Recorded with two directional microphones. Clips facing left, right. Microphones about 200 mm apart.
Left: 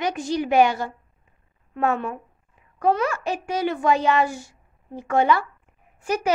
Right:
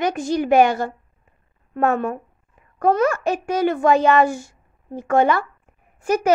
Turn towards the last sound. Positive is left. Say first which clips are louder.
# right 5 dB
turn(degrees=-45)  # may be behind; listen again after turning